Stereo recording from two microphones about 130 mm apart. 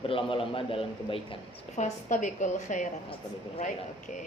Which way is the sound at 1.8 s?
65° left (ahead or behind).